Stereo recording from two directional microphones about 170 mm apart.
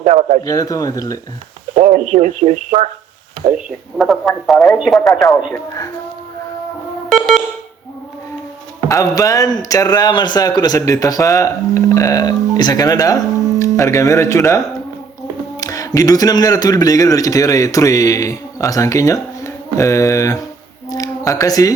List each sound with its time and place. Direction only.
0.0 s a man's voice: 45° right (ahead or behind)
0.4 s speech: 20° left (ahead or behind)
1.7 s speech: 45° right (ahead or behind)
3.9 s speech: centre (ahead or behind)
7.1 s a sound: centre (ahead or behind)
8.9 s speech: 20° left (ahead or behind)
15.6 s speech: 20° left (ahead or behind)